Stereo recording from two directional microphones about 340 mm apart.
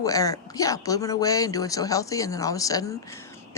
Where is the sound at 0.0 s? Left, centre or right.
Centre.